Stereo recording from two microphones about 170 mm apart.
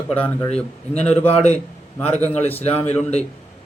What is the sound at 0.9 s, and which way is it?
Speech, 40° left (ahead or behind).